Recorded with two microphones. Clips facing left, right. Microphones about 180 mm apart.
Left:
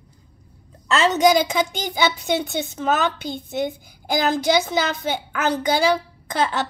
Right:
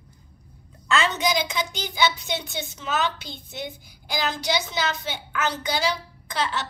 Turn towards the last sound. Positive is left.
turn(degrees=50)  # may be behind; listen again after turning